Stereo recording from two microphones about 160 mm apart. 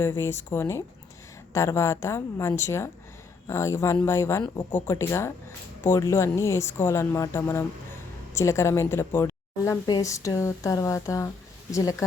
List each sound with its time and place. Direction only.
0.0 s speech: 15° left (ahead or behind)